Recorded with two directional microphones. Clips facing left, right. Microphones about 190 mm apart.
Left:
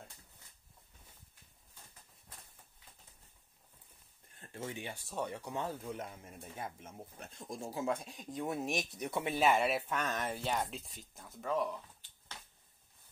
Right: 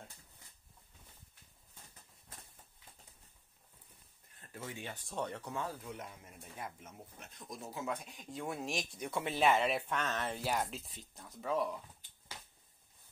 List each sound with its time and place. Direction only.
4.4 s a sound: 25° left (ahead or behind)
4.8 s speech: 5° left (ahead or behind)
5.6 s speech: 25° left (ahead or behind)
9.2 s speech: 10° left (ahead or behind)
10.4 s speech: centre (ahead or behind)